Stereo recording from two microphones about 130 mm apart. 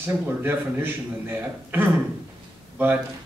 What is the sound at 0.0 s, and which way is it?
A man's voice, 15° right (ahead or behind).